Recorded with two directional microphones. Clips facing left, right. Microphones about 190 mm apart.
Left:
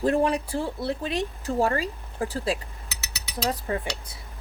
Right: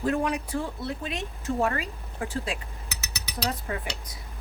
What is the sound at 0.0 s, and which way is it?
Speech, 30° left (ahead or behind).